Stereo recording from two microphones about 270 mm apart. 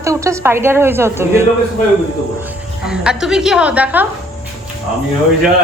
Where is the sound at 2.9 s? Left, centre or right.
Centre.